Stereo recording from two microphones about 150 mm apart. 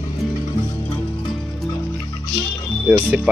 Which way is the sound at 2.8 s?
10° right (ahead or behind).